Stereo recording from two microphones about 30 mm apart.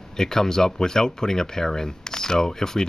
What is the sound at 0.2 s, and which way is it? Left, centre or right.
Speech, centre.